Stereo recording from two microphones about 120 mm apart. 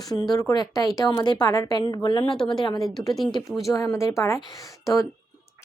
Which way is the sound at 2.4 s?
5° left (ahead or behind).